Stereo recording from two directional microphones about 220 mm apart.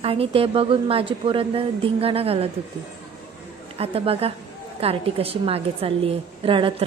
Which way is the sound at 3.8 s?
25° right (ahead or behind).